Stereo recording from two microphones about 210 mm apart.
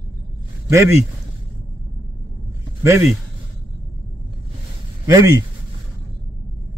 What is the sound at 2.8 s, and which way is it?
Speech, 10° right (ahead or behind).